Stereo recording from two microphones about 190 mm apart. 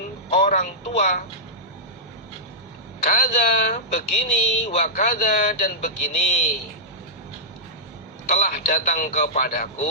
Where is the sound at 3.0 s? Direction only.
40° left (ahead or behind).